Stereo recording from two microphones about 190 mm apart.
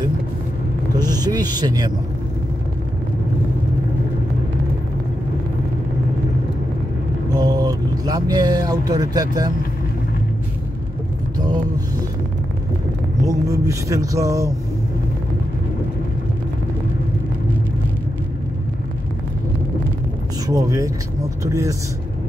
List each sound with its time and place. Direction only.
0.9 s speech: 20° right (ahead or behind)
7.3 s speech: 20° right (ahead or behind)
13.3 s speech: 15° right (ahead or behind)
20.4 s speech: 20° right (ahead or behind)